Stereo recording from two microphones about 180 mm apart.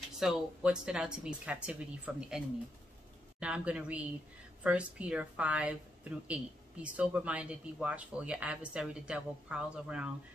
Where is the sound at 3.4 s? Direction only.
5° right (ahead or behind).